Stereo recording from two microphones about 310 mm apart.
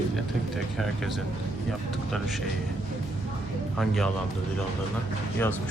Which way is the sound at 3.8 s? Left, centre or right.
Centre.